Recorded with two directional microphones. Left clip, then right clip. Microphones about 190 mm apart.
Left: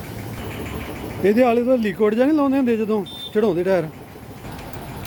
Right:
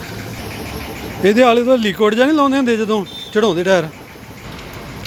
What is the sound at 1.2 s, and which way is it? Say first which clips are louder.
A man's voice: right 5 dB; centre (ahead or behind).